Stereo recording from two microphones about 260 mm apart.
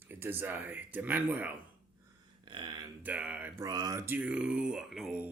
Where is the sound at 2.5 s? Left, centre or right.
Centre.